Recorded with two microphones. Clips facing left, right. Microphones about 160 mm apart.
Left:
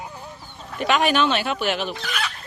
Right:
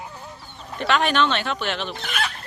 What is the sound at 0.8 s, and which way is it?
Speech, 10° left (ahead or behind).